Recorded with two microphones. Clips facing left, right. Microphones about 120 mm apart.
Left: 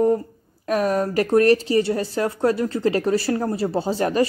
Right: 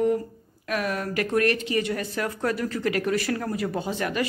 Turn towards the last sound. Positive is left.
turn(degrees=35)  # may be behind; listen again after turning